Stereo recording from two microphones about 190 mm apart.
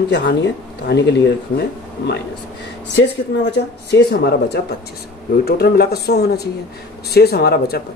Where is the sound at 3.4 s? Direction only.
65° left (ahead or behind).